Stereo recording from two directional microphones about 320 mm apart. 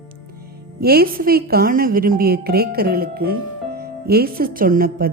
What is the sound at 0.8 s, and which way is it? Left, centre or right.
A woman's voice, right.